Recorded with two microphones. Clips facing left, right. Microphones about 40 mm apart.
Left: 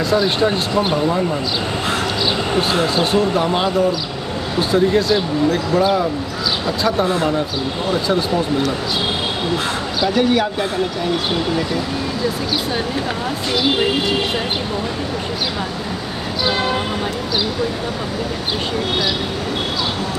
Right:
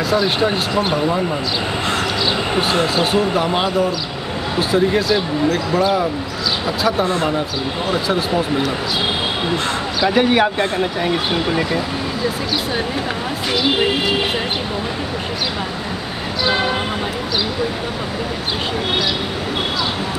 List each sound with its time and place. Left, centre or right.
0.1 s speech: centre
2.7 s speech: centre
10.0 s speech: right